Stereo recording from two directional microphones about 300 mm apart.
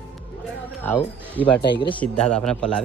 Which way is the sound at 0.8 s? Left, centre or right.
Centre.